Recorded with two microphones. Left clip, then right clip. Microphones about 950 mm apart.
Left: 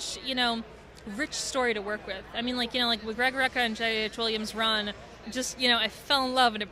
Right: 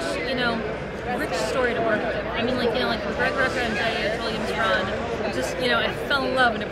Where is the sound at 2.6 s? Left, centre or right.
Left.